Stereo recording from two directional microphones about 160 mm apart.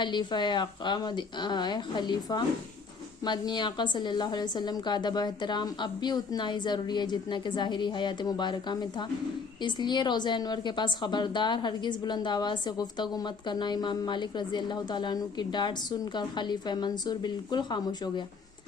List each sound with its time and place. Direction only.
0.0 s a woman's voice: 30° left (ahead or behind)